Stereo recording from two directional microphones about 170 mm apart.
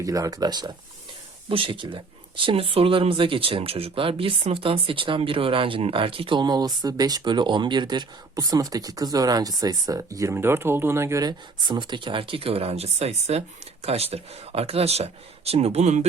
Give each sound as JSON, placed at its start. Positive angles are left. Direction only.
{"t": 0.0, "sound": "speech", "side_deg": -20}